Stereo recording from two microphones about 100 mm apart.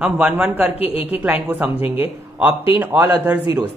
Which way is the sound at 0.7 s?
80° left.